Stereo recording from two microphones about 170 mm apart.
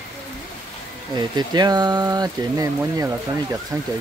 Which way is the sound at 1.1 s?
25° right (ahead or behind).